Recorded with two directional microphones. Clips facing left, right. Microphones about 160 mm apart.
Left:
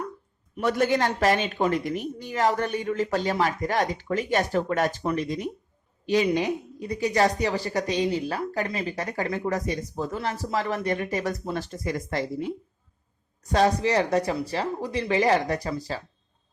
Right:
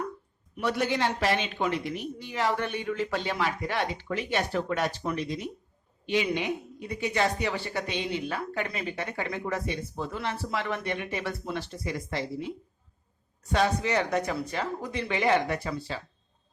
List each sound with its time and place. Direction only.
0.5 s a woman's voice: 45° left (ahead or behind)
6.3 s a woman's voice: 35° left (ahead or behind)
13.4 s a woman's voice: 35° left (ahead or behind)